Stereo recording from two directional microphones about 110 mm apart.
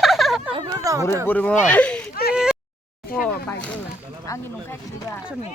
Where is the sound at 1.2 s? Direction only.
15° left (ahead or behind).